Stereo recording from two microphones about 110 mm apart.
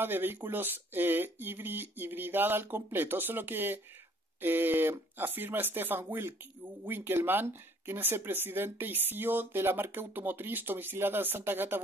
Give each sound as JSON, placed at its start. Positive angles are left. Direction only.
{"t": 0.0, "sound": "speech", "side_deg": -20}